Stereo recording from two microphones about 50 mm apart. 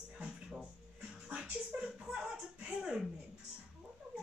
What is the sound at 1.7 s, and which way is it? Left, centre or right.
Music, right.